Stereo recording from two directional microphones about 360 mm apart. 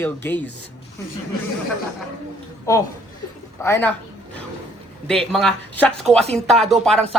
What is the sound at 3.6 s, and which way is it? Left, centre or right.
Speech, centre.